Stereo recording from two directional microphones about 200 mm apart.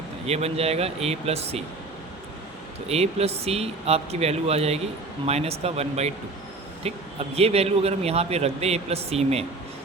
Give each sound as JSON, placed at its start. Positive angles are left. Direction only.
{"t": 0.3, "sound": "a man's voice", "side_deg": -30}
{"t": 2.9, "sound": "a man's voice", "side_deg": -30}